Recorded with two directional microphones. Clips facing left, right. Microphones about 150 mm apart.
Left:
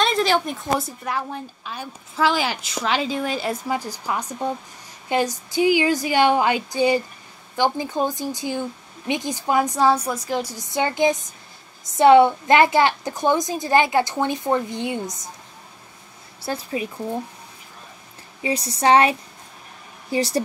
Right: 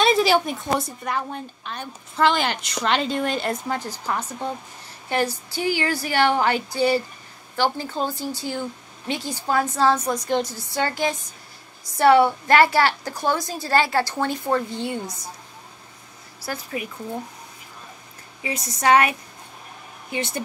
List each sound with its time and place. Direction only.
0.0 s a woman's voice: 5° right (ahead or behind); by 15.1 s 15° left (ahead or behind)
16.4 s a woman's voice: 30° left (ahead or behind)
18.4 s a woman's voice: 30° left (ahead or behind)